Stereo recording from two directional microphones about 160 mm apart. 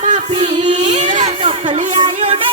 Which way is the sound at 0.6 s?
45° right (ahead or behind).